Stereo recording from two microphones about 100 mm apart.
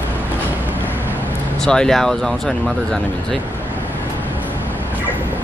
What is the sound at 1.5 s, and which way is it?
Speech, 5° left (ahead or behind).